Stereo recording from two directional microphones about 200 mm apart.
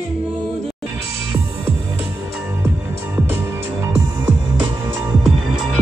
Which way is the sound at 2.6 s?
10° right (ahead or behind).